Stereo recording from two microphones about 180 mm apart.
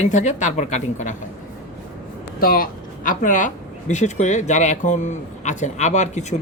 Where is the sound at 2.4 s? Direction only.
55° left (ahead or behind); by 6.2 s 40° left (ahead or behind).